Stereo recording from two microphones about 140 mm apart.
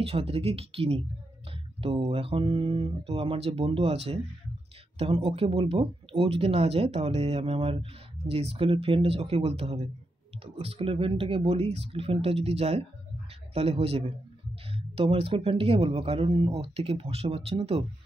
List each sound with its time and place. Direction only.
0.0 s speech: 45° right (ahead or behind)